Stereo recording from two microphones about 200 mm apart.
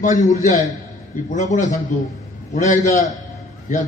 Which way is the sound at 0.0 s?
40° left (ahead or behind).